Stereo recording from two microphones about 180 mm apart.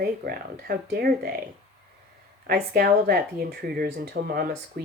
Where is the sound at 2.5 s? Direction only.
60° right (ahead or behind).